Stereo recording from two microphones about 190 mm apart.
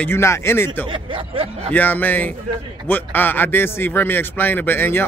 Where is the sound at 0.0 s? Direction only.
15° left (ahead or behind).